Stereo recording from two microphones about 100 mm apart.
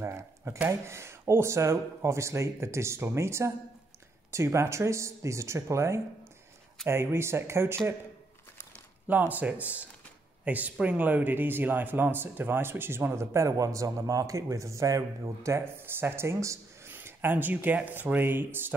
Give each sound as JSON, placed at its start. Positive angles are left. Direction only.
{"t": 0.0, "sound": "speech", "side_deg": -25}
{"t": 9.3, "sound": "speech", "side_deg": -15}